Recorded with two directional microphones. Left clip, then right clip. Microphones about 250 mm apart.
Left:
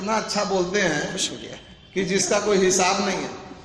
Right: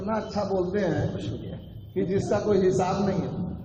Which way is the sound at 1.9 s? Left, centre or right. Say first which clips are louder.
Left 4 dB; left.